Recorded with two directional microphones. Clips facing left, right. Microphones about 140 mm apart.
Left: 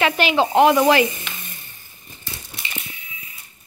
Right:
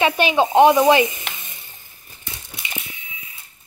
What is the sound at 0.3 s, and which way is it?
Speech, 20° right (ahead or behind).